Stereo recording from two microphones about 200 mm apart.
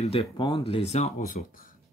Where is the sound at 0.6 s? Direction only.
30° left (ahead or behind).